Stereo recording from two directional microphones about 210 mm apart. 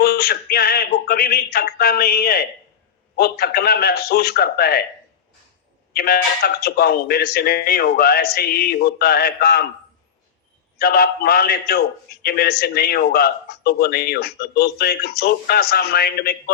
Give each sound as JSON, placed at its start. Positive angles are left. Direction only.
{"t": 0.0, "sound": "a man's voice", "side_deg": 45}
{"t": 5.9, "sound": "a man's voice", "side_deg": 45}
{"t": 10.8, "sound": "a man's voice", "side_deg": 45}